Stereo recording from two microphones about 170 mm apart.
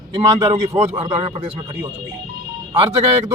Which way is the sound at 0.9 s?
30° right (ahead or behind).